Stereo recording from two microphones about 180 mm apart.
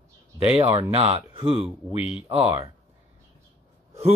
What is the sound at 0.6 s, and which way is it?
Speech, 30° right (ahead or behind).